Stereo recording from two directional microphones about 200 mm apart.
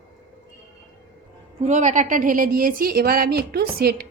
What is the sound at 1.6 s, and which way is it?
A woman's voice, 35° right (ahead or behind).